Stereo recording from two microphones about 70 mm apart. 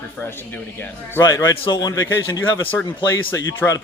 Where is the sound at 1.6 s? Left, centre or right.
Left.